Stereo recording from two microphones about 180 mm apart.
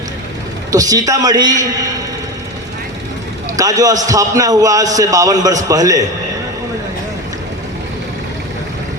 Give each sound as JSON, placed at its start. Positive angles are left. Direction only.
{"t": 0.7, "sound": "a man's voice", "side_deg": -20}
{"t": 3.6, "sound": "a man's voice", "side_deg": -20}